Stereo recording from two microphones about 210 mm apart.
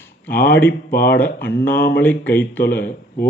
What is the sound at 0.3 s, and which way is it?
Speech, 10° left (ahead or behind).